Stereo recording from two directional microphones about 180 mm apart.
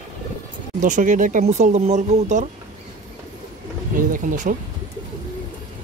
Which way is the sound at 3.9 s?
45° right (ahead or behind).